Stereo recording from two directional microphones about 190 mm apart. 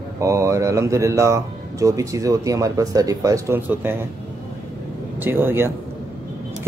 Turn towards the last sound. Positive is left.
turn(degrees=-10)  # may be behind; listen again after turning